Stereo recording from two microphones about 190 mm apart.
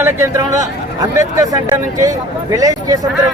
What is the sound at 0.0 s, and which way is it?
Speech, 15° right (ahead or behind).